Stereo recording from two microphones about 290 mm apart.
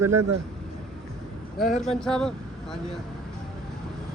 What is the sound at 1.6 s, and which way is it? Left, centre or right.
Speech, left.